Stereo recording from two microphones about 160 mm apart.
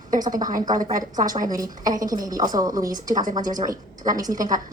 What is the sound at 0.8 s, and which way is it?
Speech, 55° right (ahead or behind).